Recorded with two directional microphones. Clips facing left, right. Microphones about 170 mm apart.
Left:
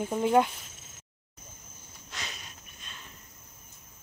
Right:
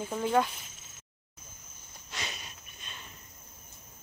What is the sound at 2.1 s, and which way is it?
Cricket, 5° right (ahead or behind).